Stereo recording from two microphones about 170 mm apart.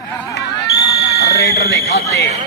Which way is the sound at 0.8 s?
20° left (ahead or behind).